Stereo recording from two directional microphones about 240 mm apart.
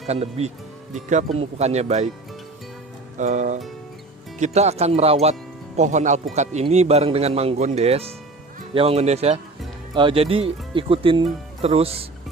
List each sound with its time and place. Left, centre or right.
0.1 s speech: right
3.2 s speech: right